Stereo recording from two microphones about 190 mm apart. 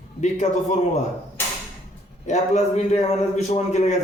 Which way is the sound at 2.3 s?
35° left (ahead or behind).